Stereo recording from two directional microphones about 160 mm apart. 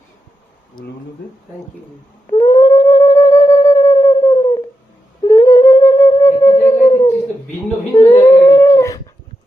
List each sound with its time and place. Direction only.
2.4 s a sound: 20° left (ahead or behind)
5.2 s humming: 25° left (ahead or behind)
6.7 s dog: 20° left (ahead or behind)